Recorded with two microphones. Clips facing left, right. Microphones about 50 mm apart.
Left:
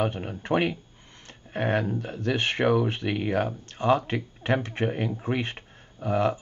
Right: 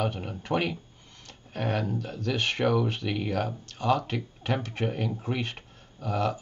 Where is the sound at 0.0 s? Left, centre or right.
Left.